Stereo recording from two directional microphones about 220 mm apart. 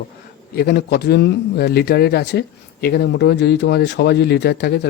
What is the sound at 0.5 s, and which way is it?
Speech, 45° left (ahead or behind).